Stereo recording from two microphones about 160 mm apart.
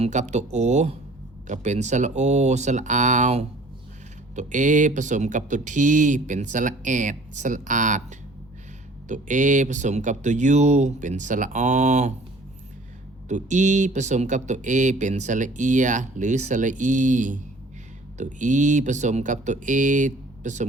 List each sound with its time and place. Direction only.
0.0 s speech: 45° right (ahead or behind)
9.0 s speech: 55° right (ahead or behind)
13.2 s speech: 50° right (ahead or behind)